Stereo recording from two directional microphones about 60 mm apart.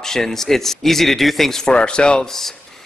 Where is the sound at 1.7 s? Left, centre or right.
Centre.